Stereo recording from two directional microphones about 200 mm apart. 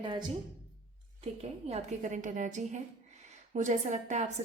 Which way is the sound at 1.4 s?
30° right (ahead or behind).